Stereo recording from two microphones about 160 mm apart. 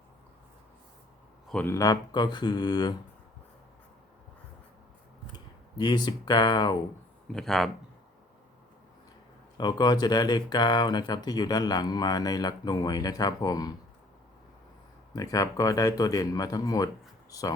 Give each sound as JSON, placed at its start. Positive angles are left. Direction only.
{"t": 1.5, "sound": "speech", "side_deg": 5}
{"t": 1.7, "sound": "speech", "side_deg": 20}
{"t": 5.7, "sound": "speech", "side_deg": 25}
{"t": 7.3, "sound": "speech", "side_deg": 0}
{"t": 9.6, "sound": "speech", "side_deg": 25}
{"t": 15.1, "sound": "speech", "side_deg": 20}